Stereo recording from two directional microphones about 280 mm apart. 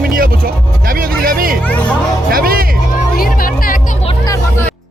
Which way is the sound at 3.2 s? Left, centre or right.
Left.